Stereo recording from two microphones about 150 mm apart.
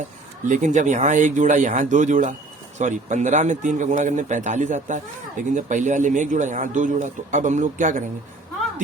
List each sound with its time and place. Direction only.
0.4 s a man's voice: 55° right (ahead or behind)